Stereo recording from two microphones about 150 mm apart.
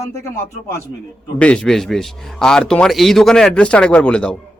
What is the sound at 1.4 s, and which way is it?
Speech, 5° left (ahead or behind).